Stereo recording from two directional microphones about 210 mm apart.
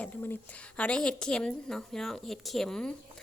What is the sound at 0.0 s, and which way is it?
Speech, 10° left (ahead or behind).